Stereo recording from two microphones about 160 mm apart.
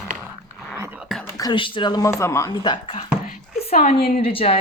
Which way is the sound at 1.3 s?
25° left (ahead or behind).